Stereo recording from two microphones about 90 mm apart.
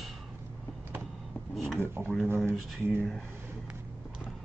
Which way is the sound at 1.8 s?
25° right (ahead or behind).